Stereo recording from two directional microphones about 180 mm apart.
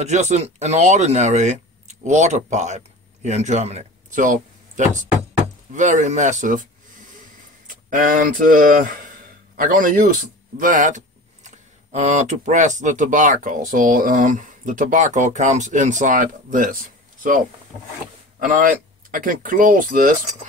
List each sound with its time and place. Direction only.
0.0 s speech: 40° right (ahead or behind)
7.6 s a man's voice: 50° right (ahead or behind)
18.4 s speech: 50° right (ahead or behind)